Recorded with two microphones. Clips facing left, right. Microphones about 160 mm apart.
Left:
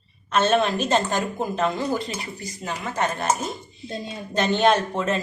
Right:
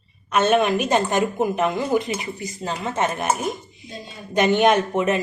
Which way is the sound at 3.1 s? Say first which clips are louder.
Right 2 dB; 15° right (ahead or behind).